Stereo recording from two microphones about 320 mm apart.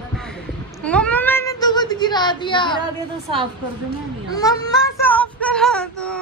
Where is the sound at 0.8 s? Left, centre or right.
Centre.